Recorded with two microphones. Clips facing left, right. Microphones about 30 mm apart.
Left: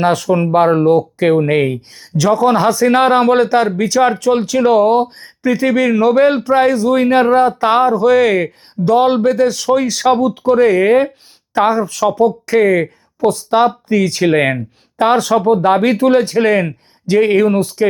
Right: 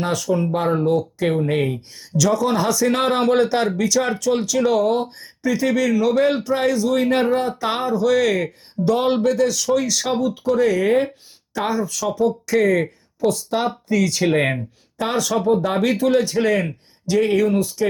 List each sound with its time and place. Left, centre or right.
0.0 s speech: left
8.4 s speech: centre
9.2 s speech: left
13.3 s speech: left
14.2 s speech: left
15.0 s speech: left